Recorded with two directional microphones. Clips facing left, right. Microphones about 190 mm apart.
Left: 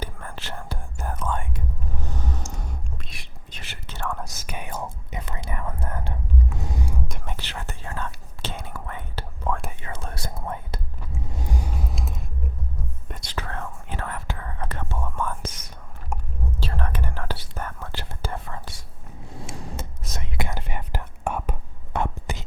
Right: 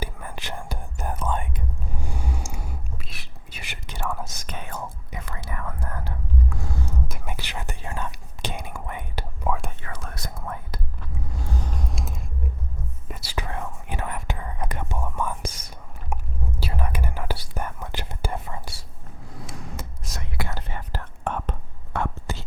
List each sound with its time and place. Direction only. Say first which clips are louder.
0.0 s whispering: right 1 dB; 10° right (ahead or behind)
3.6 s whispering: right 2 dB; 15° right (ahead or behind)
4.0 s whispering: even; 5° right (ahead or behind)
4.4 s whispering: left 1 dB; 10° left (ahead or behind)
4.7 s whispering: left 2 dB; 20° left (ahead or behind)
7.1 s whispering: right 1 dB; 5° right (ahead or behind)
9.8 s whispering: left 2 dB; 25° left (ahead or behind); by 18.8 s 15° right (ahead or behind)
19.3 s whispering: left 2 dB; 25° left (ahead or behind)